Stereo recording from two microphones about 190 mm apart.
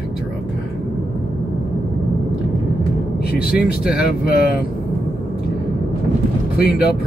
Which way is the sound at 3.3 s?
5° right (ahead or behind).